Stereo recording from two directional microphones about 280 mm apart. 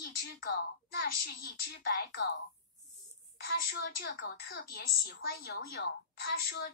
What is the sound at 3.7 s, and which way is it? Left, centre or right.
Speech, left.